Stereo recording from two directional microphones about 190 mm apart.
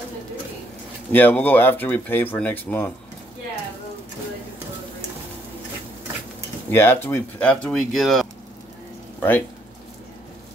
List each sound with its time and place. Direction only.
1.1 s speech: 10° left (ahead or behind)
6.7 s speech: 10° left (ahead or behind)